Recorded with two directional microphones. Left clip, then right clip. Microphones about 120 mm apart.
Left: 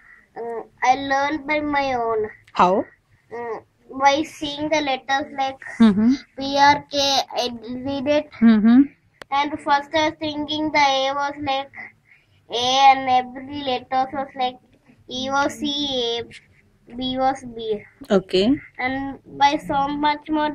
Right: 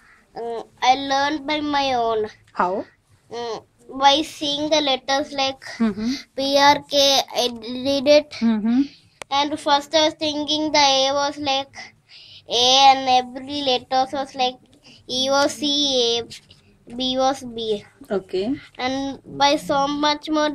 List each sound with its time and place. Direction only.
0.3 s a child's voice: 30° right (ahead or behind)
2.5 s a woman's voice: 30° left (ahead or behind)
2.8 s a sound: 25° right (ahead or behind)
3.9 s child singing: 15° right (ahead or behind)
4.7 s a child's voice: 25° right (ahead or behind)
5.8 s a woman's voice: 20° left (ahead or behind)
6.4 s a child's voice: 20° right (ahead or behind)
7.8 s music: 60° right (ahead or behind)
8.5 s speech: 20° left (ahead or behind)
9.3 s a child's voice: 30° right (ahead or behind)
18.0 s a woman's voice: 20° left (ahead or behind)
18.8 s speech: 30° right (ahead or behind)